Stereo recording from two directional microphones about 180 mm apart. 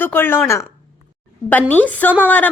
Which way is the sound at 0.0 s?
10° left (ahead or behind).